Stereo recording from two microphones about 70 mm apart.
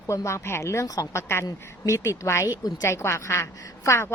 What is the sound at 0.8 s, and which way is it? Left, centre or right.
Speech, left.